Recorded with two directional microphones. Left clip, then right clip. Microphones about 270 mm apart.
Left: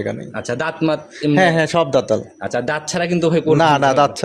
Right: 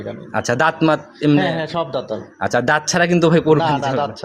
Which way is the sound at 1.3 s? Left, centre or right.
Left.